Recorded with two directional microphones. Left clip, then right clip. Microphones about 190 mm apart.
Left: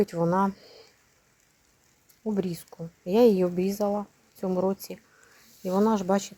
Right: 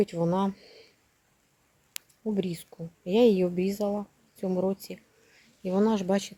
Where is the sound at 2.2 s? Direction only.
Centre (ahead or behind).